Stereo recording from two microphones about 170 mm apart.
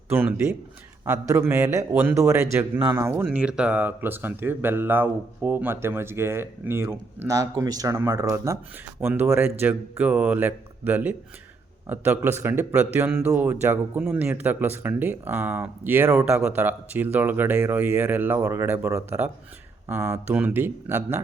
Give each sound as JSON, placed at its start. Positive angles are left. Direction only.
{"t": 0.1, "sound": "speech", "side_deg": -10}
{"t": 3.2, "sound": "speech", "side_deg": -5}